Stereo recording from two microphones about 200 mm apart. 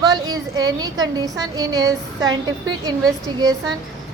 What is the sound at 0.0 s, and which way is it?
A woman's voice, 20° right (ahead or behind).